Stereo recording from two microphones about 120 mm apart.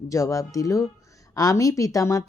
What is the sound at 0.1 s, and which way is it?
Speech, 30° left (ahead or behind).